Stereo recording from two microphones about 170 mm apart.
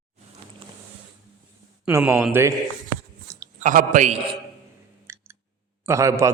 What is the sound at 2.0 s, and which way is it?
Speech, 15° right (ahead or behind).